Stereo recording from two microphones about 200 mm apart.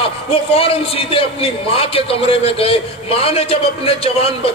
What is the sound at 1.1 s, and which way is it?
A man's voice, 30° left (ahead or behind).